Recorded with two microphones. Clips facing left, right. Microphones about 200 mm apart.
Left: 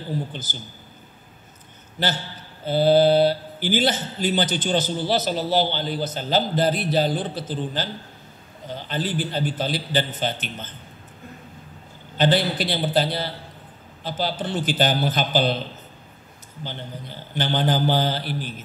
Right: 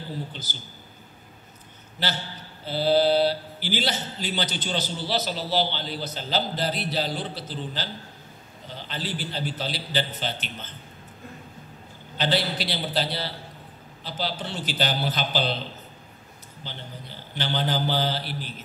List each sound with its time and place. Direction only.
0.3 s speech: 50° left (ahead or behind)
2.0 s speech: 50° left (ahead or behind)
12.2 s speech: 50° left (ahead or behind)
17.4 s speech: 50° left (ahead or behind)